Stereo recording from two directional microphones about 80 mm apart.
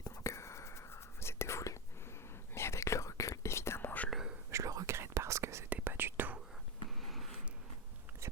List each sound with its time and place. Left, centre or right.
0.0 s whispering: left
4.1 s whispering: centre
4.5 s whispering: right
5.6 s whispering: right
7.0 s a sound: centre